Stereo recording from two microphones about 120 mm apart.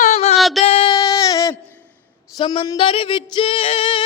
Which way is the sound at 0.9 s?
30° left (ahead or behind).